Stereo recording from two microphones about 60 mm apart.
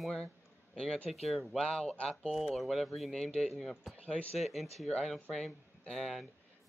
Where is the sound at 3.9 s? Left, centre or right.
Centre.